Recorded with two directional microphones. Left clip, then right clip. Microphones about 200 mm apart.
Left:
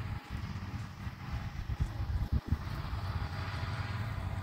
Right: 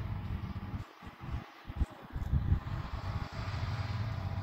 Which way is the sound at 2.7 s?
30° left (ahead or behind).